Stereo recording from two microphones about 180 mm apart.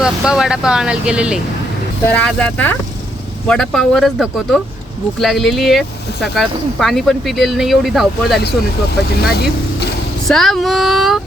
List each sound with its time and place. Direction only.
0.0 s speech: 5° right (ahead or behind)
2.1 s speech: 10° left (ahead or behind)
9.2 s speech: 60° left (ahead or behind)
10.2 s speech: centre (ahead or behind)